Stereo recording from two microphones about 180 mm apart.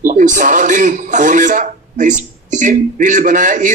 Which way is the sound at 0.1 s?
45° right (ahead or behind).